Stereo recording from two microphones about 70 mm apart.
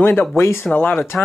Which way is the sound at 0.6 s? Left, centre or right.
Left.